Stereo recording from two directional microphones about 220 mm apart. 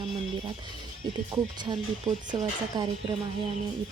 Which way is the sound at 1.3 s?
20° right (ahead or behind).